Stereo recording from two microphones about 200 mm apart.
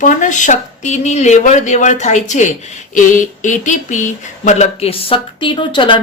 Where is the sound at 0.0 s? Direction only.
40° left (ahead or behind).